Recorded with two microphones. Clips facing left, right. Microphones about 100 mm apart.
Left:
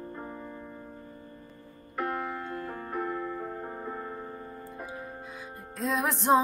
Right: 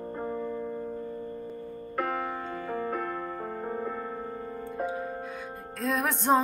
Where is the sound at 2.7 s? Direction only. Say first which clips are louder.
Right 4 dB; 60° right (ahead or behind).